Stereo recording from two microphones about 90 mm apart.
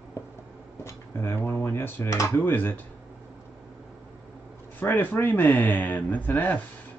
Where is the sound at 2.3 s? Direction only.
20° left (ahead or behind).